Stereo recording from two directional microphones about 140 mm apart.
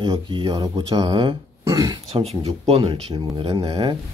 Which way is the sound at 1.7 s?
25° right (ahead or behind).